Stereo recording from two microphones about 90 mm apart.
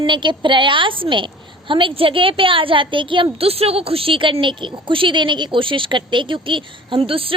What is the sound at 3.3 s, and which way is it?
A woman's voice, 90° right.